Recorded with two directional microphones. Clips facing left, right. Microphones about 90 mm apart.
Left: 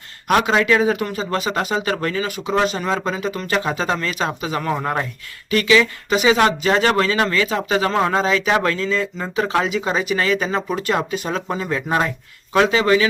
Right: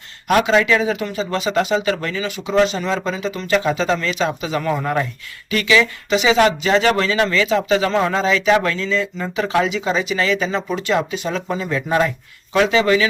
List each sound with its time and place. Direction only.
0.4 s speech: 40° left (ahead or behind)
3.5 s speech: 35° left (ahead or behind)